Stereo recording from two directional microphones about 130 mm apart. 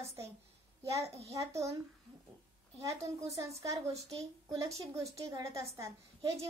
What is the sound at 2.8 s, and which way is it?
A woman's voice, 25° right (ahead or behind).